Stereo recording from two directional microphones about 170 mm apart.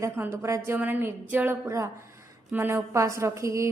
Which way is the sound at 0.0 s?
15° right (ahead or behind).